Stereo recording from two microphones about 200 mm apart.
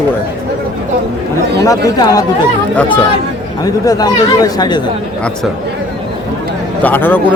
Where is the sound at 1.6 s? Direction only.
15° left (ahead or behind).